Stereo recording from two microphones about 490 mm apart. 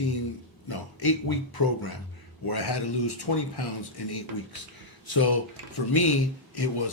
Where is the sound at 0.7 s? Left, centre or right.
Left.